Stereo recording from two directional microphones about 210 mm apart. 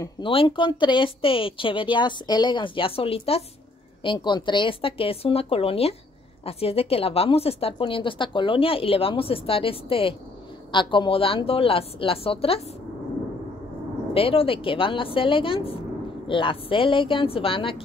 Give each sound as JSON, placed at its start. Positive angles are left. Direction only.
{"t": 0.0, "sound": "a woman's voice", "side_deg": 25}
{"t": 14.1, "sound": "a woman's voice", "side_deg": 25}